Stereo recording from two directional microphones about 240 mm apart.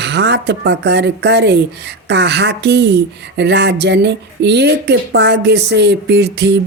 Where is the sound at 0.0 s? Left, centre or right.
Right.